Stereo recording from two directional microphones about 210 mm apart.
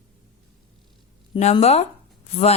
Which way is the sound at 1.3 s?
30° left (ahead or behind).